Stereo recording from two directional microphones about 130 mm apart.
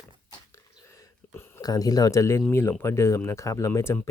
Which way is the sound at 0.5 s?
25° left (ahead or behind).